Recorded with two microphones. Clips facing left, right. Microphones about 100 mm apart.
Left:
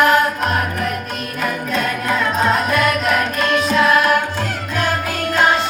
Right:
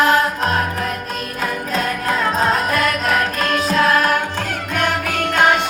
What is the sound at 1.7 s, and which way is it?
Music, 35° right (ahead or behind).